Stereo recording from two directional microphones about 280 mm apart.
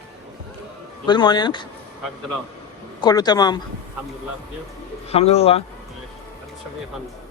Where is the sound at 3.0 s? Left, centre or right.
Centre.